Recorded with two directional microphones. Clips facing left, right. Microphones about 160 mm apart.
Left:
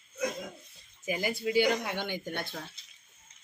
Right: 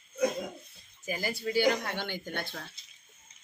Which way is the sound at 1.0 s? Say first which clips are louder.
Left 2 dB; 20° left (ahead or behind).